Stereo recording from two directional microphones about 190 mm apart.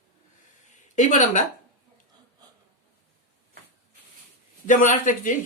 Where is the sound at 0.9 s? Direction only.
40° left (ahead or behind).